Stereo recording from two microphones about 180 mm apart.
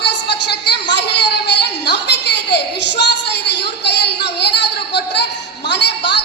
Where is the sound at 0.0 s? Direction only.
70° left (ahead or behind).